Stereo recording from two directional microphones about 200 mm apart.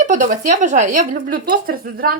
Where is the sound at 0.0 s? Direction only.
40° right (ahead or behind).